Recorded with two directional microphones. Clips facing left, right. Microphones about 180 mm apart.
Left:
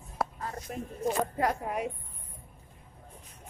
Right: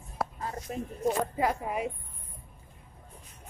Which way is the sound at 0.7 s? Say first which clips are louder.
Right 3 dB; 20° right (ahead or behind).